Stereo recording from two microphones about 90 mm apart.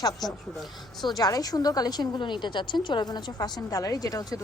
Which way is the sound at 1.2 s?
45° left (ahead or behind).